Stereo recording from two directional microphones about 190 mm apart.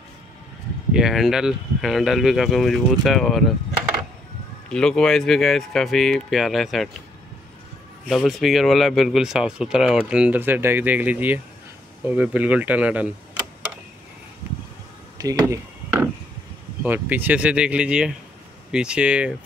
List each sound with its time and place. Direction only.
0.9 s speech: centre (ahead or behind)
4.6 s speech: 5° left (ahead or behind)
8.1 s speech: centre (ahead or behind)
15.1 s a sound: 15° right (ahead or behind)
16.8 s speech: 10° right (ahead or behind)